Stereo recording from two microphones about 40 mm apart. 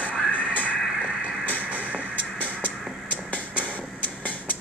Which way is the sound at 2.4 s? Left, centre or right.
Left.